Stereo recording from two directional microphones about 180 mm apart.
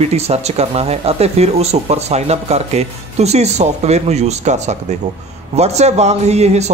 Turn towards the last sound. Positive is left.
turn(degrees=-35)  # may be behind; listen again after turning